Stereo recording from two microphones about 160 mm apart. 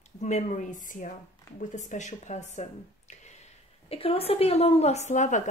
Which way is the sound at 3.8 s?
35° left (ahead or behind).